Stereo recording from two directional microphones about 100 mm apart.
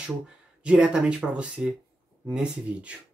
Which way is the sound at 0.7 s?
10° right (ahead or behind).